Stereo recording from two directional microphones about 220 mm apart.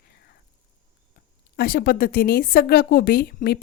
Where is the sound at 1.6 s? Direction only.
40° left (ahead or behind).